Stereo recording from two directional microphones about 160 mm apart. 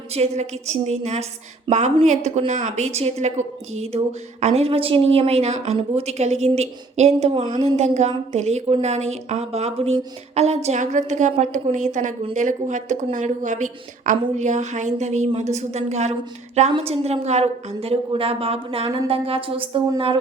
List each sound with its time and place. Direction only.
0.1 s a woman's voice: 40° right (ahead or behind)